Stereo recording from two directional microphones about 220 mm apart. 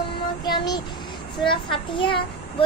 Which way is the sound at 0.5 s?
20° left (ahead or behind).